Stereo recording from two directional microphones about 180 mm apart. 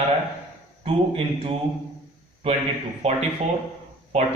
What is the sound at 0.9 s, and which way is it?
Speech, 30° right (ahead or behind).